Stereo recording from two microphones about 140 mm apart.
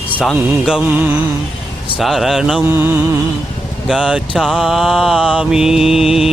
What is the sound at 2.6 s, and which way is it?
Mantra, 15° right (ahead or behind).